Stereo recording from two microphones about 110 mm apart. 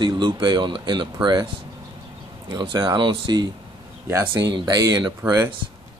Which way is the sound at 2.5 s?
45° right (ahead or behind).